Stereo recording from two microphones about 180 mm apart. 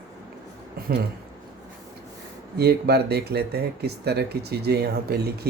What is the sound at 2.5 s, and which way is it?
Speech, 60° right (ahead or behind).